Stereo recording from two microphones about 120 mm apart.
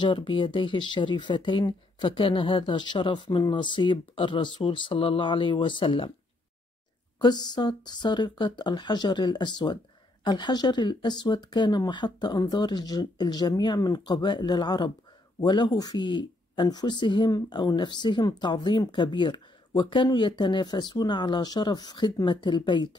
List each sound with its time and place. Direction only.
0.0 s speech: 45° left (ahead or behind)
7.2 s speech: 35° left (ahead or behind)